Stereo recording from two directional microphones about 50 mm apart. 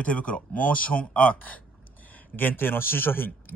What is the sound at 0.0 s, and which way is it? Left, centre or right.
Speech, left.